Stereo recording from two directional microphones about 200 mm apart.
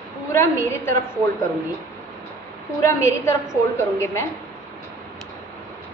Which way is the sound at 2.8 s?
15° left (ahead or behind).